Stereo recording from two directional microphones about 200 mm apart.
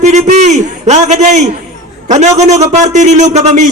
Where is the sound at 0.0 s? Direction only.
35° right (ahead or behind).